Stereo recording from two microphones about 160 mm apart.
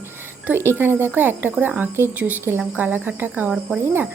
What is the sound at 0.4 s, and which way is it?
Speech, 15° right (ahead or behind).